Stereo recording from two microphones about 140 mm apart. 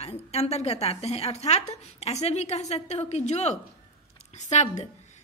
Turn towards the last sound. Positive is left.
turn(degrees=55)  # may be behind; listen again after turning